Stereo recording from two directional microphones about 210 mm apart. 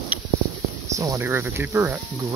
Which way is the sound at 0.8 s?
15° right (ahead or behind).